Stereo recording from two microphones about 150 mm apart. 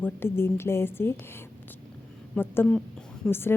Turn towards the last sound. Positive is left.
turn(degrees=15)  # may be behind; listen again after turning